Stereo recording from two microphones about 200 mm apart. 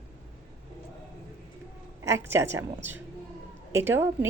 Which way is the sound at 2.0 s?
15° right (ahead or behind).